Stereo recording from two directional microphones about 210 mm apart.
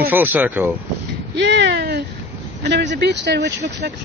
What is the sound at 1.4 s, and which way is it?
Speech, 55° right (ahead or behind).